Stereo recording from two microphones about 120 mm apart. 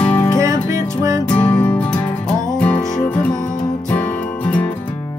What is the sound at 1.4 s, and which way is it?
Music, 15° left (ahead or behind).